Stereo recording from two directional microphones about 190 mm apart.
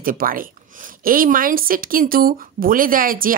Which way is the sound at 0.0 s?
45° right (ahead or behind).